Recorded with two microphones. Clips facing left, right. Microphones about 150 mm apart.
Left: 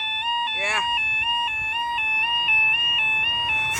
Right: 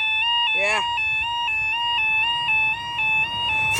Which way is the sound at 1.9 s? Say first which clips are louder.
Right 1 dB; 20° right (ahead or behind).